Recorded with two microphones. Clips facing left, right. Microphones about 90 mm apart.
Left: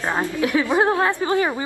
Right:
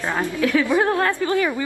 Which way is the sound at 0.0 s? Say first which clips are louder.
Even; 20° left (ahead or behind).